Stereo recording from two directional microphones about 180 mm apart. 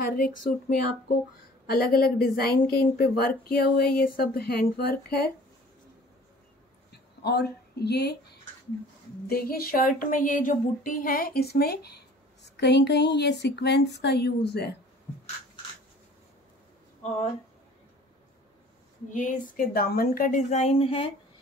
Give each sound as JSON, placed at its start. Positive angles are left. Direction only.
{"t": 0.0, "sound": "a woman's voice", "side_deg": 50}
{"t": 6.9, "sound": "speech", "side_deg": 65}
{"t": 17.0, "sound": "speech", "side_deg": 40}
{"t": 19.0, "sound": "a woman's voice", "side_deg": 45}